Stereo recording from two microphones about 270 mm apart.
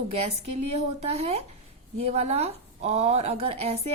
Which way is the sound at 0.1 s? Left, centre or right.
Right.